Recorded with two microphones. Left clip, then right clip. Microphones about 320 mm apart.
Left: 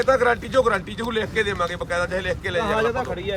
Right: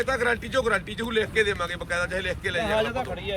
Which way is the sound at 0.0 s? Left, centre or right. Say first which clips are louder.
Left 6 dB; left.